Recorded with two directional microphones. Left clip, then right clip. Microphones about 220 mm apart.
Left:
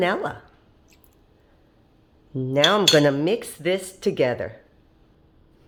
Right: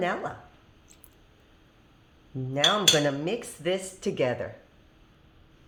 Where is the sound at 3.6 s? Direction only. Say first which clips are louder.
Left 5 dB; 30° left (ahead or behind).